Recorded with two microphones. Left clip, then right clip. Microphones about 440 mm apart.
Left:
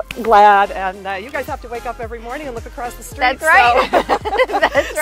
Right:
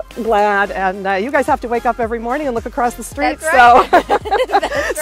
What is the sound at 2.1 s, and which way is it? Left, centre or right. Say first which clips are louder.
Speech: right 8 dB; right.